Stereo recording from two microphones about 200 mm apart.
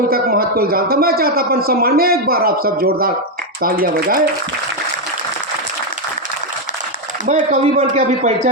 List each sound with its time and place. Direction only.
0.1 s a man's voice: 50° right (ahead or behind)
7.3 s speech: 35° right (ahead or behind)